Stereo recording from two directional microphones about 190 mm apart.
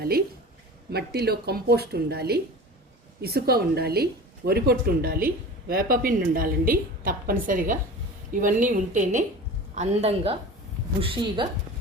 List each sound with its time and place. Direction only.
0.9 s a woman's voice: 55° right (ahead or behind); by 11.4 s 25° right (ahead or behind)